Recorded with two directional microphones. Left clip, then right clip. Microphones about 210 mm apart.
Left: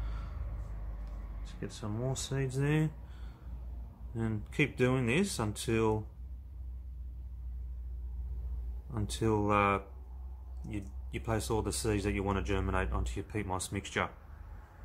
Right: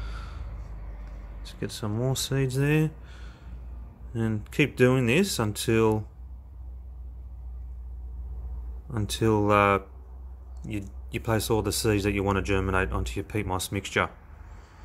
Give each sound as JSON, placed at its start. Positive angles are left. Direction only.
{"t": 1.4, "sound": "speech", "side_deg": -35}
{"t": 4.1, "sound": "speech", "side_deg": -25}
{"t": 8.9, "sound": "speech", "side_deg": -30}